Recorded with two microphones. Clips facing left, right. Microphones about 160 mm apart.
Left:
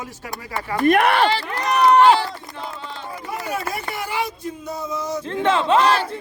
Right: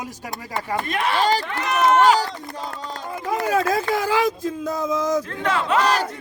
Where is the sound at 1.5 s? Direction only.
40° left (ahead or behind).